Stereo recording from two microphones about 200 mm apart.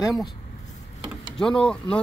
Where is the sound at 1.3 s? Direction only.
5° left (ahead or behind).